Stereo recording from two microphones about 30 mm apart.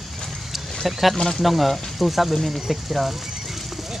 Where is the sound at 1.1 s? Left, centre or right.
Centre.